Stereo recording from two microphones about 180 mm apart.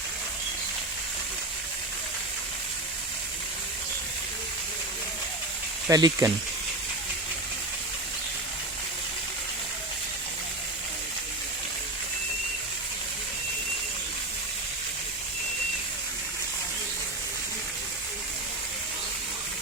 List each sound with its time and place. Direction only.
5.9 s speech: 20° right (ahead or behind)